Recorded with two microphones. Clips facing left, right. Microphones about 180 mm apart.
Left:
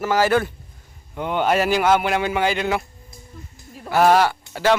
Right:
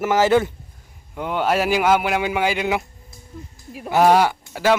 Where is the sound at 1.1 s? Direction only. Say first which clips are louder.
Left 1 dB; 5° right (ahead or behind).